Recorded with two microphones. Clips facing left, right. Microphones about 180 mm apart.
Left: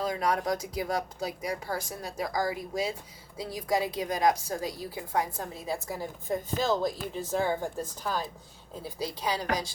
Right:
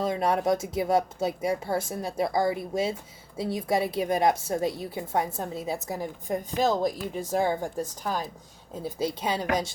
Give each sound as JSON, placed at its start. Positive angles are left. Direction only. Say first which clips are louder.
{"t": 0.0, "sound": "a woman's voice", "louder": "right 4 dB", "side_deg": -25}
{"t": 8.8, "sound": "a woman's voice", "louder": "right 5 dB", "side_deg": -25}